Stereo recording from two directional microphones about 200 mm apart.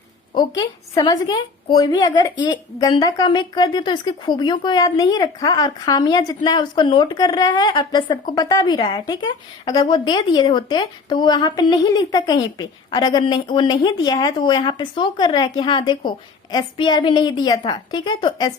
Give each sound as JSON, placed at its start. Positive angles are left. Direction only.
{"t": 0.3, "sound": "speech", "side_deg": 20}